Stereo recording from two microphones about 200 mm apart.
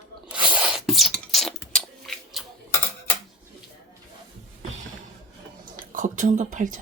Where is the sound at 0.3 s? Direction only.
5° right (ahead or behind).